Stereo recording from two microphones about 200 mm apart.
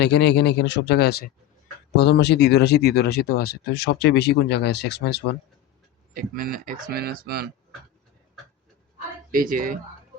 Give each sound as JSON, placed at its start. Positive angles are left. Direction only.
{"t": 0.0, "sound": "speech", "side_deg": 60}
{"t": 6.1, "sound": "speech", "side_deg": -45}
{"t": 9.3, "sound": "speech", "side_deg": -45}